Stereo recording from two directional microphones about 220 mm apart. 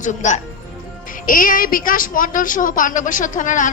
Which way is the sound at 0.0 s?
35° left (ahead or behind).